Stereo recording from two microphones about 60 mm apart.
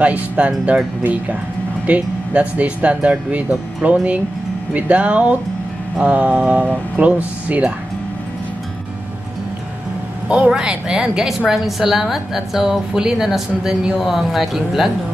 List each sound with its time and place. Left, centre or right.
0.0 s speech: right
1.9 s speech: right
10.2 s a woman's voice: centre